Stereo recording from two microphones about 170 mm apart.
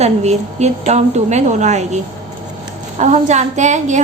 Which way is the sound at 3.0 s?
45° right (ahead or behind).